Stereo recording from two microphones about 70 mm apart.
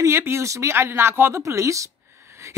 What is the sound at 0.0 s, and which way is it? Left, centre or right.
Speech, right.